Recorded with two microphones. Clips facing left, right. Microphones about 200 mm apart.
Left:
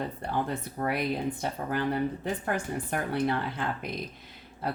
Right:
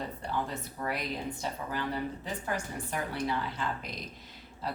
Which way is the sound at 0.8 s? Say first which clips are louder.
Left 6 dB; 55° left (ahead or behind).